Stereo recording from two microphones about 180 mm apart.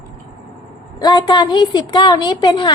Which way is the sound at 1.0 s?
20° left (ahead or behind).